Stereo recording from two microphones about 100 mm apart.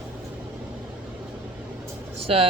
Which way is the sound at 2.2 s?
75° right (ahead or behind).